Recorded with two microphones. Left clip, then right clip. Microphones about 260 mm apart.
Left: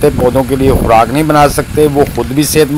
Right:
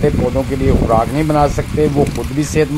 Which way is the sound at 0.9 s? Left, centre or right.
Centre.